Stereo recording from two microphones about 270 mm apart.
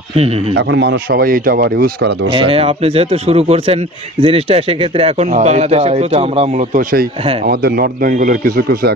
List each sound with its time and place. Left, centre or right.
0.1 s speech: right
0.6 s speech: right
2.3 s speech: centre